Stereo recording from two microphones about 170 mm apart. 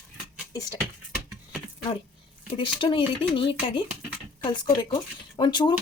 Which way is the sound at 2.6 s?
30° left (ahead or behind).